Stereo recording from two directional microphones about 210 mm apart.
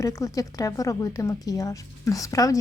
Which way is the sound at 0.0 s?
15° left (ahead or behind).